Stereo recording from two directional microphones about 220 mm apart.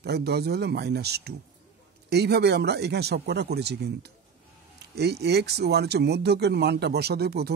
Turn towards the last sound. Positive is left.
turn(degrees=-45)  # may be behind; listen again after turning